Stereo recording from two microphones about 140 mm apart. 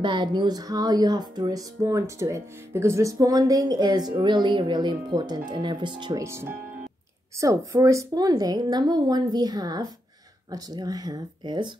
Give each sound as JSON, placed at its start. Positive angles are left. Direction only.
{"t": 0.0, "sound": "speech", "side_deg": -35}
{"t": 6.2, "sound": "speech", "side_deg": -20}